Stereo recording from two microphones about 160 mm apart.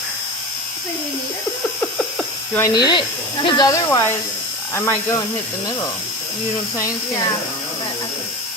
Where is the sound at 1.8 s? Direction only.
5° left (ahead or behind).